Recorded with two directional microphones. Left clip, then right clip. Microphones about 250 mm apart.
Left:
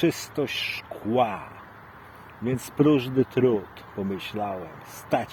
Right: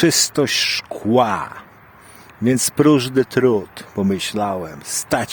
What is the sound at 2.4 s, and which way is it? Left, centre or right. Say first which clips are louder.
Speech: right 7 dB; right.